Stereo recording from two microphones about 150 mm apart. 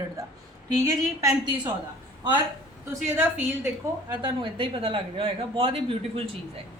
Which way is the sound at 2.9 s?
15° right (ahead or behind).